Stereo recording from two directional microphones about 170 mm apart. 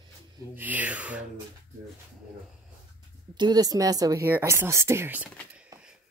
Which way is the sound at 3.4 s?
25° right (ahead or behind).